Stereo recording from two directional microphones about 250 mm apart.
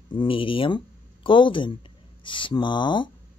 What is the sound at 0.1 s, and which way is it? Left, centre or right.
Speech, left.